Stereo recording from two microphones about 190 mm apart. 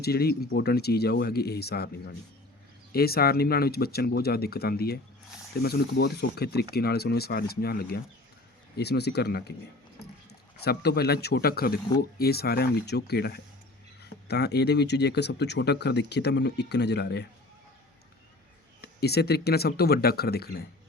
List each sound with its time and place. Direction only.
0.0 s speech: 55° left (ahead or behind)
10.6 s speech: 55° left (ahead or behind)
18.8 s speech: 60° left (ahead or behind)